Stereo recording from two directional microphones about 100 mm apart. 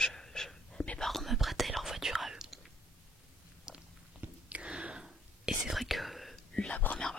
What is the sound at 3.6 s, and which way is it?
Biting, 10° right (ahead or behind).